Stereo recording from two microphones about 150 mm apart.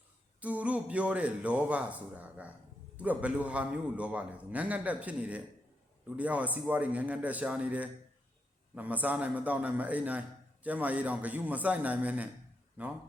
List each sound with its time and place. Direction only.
0.3 s a man's voice: 10° right (ahead or behind)